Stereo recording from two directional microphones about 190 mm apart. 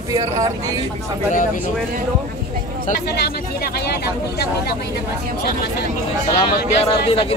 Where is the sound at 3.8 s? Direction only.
55° left (ahead or behind).